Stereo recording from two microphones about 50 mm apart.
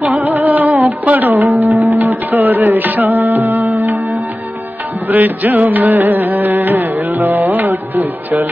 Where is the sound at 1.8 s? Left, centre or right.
Right.